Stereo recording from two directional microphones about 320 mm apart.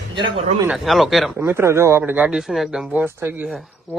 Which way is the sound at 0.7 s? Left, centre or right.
Centre.